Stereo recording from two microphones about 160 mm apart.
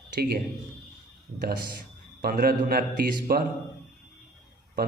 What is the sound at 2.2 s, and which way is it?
A man's voice, 70° right (ahead or behind).